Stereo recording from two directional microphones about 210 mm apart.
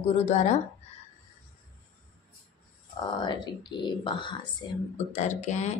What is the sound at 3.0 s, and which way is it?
A woman's voice, 20° left (ahead or behind).